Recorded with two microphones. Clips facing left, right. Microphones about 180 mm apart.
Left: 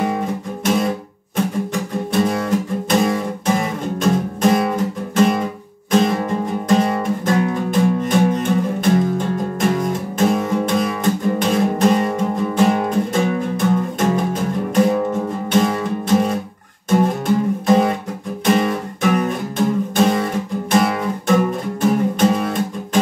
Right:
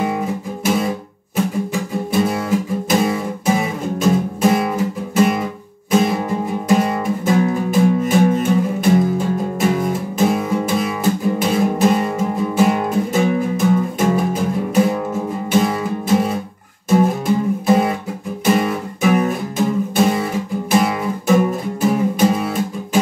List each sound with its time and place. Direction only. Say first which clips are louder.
0.0 s music: even; 5° right (ahead or behind)
17.6 s music: left 1 dB; 5° right (ahead or behind)